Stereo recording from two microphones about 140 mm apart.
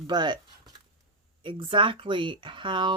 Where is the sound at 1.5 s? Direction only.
35° right (ahead or behind).